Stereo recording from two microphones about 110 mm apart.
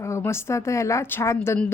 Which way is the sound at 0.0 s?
25° left (ahead or behind).